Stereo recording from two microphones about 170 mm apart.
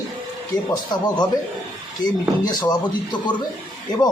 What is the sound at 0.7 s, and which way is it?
Speech, 25° left (ahead or behind).